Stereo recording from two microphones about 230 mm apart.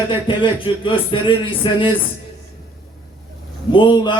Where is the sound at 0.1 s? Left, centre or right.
Left.